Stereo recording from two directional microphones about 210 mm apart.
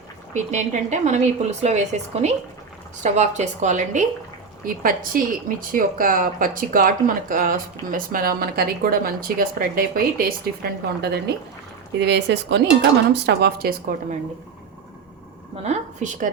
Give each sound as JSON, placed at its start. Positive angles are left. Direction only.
{"t": 0.3, "sound": "a woman's voice", "side_deg": -35}
{"t": 15.6, "sound": "a woman's voice", "side_deg": -35}